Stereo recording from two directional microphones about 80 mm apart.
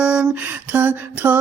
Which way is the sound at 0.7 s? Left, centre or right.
Right.